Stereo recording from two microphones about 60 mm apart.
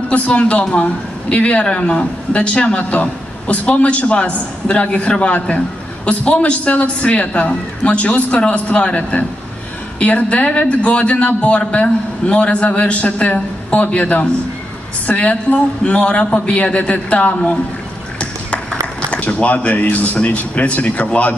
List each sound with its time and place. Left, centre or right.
0.1 s a woman's voice: centre
19.0 s a woman's voice: left